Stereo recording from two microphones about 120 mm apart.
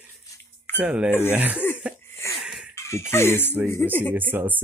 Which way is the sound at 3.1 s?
20° left (ahead or behind).